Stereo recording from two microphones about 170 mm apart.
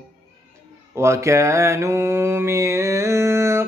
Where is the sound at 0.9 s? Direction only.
15° right (ahead or behind).